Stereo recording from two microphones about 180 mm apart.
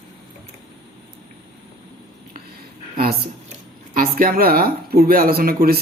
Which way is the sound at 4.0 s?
55° right (ahead or behind).